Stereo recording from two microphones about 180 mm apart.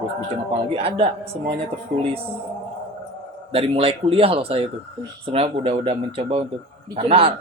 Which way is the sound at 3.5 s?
30° right (ahead or behind).